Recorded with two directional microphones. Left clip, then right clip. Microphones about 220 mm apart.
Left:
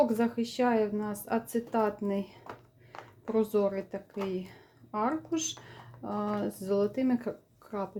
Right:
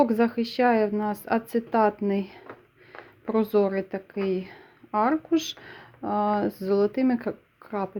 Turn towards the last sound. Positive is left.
turn(degrees=-30)  # may be behind; listen again after turning